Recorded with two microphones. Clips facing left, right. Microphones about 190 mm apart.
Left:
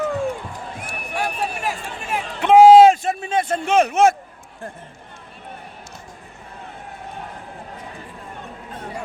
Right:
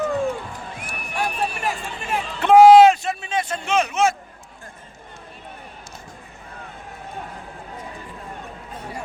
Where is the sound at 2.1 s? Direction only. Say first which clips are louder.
Even; 15° left (ahead or behind).